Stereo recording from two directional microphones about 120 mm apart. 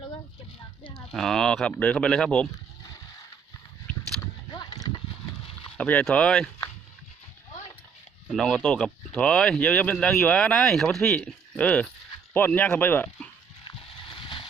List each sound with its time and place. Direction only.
1.1 s speech: 5° left (ahead or behind)
4.5 s horse: 35° left (ahead or behind)
5.7 s speech: 10° left (ahead or behind)
8.3 s speech: 5° left (ahead or behind)
13.7 s a sound: 45° left (ahead or behind)